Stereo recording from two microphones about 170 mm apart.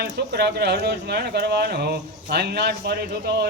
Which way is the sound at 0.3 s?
70° right (ahead or behind).